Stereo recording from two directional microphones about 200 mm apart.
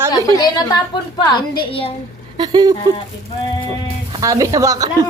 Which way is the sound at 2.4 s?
20° right (ahead or behind).